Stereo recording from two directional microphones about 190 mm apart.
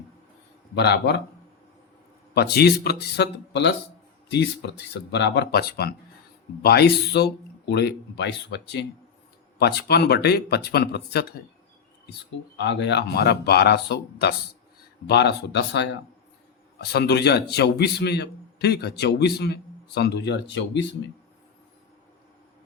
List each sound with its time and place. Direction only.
0.8 s a man's voice: 60° left (ahead or behind)
2.3 s a man's voice: 60° left (ahead or behind)
12.5 s a man's voice: 65° left (ahead or behind)